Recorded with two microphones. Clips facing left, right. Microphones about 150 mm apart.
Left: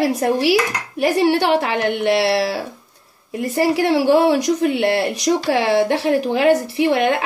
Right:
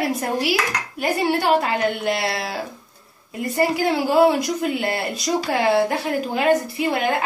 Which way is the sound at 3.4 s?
90° left.